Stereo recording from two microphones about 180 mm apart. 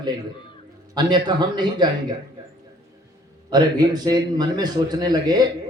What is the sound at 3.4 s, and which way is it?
A man's voice, 20° right (ahead or behind).